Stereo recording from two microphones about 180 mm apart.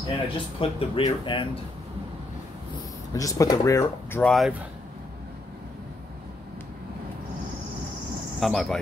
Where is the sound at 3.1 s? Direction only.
20° left (ahead or behind).